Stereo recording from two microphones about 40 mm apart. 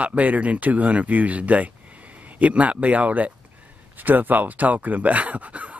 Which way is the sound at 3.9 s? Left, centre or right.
Right.